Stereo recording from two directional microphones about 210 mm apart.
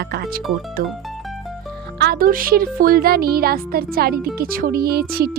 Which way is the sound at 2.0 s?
45° right (ahead or behind).